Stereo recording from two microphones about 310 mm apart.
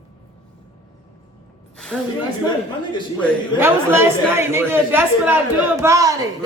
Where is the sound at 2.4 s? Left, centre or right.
Centre.